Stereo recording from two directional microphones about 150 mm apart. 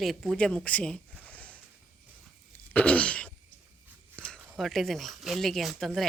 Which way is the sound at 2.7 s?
10° left (ahead or behind).